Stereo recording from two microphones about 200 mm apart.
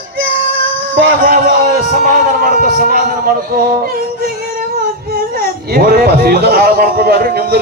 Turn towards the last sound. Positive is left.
turn(degrees=-50)  # may be behind; listen again after turning